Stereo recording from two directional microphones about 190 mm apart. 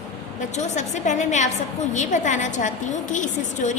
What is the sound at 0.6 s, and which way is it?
A woman's voice, 40° left (ahead or behind).